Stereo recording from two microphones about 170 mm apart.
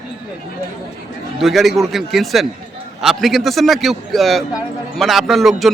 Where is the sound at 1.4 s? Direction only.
Centre (ahead or behind).